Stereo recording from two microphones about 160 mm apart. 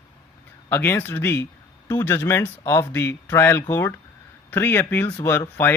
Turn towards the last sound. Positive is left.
turn(degrees=15)  # may be behind; listen again after turning